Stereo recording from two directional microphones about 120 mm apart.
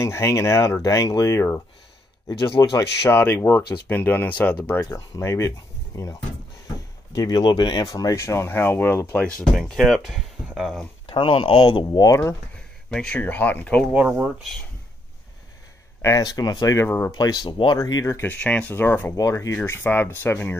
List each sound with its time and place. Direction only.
0.0 s speech: 25° left (ahead or behind)
7.2 s speech: 35° left (ahead or behind); by 9.3 s 15° left (ahead or behind)
9.6 s speech: centre (ahead or behind)
11.1 s speech: 45° left (ahead or behind)
12.9 s speech: 10° left (ahead or behind)
14.2 s speech: centre (ahead or behind)
16.0 s speech: 25° left (ahead or behind)
17.1 s speech: 35° left (ahead or behind)
18.4 s speech: 15° left (ahead or behind)
19.1 s speech: 30° left (ahead or behind)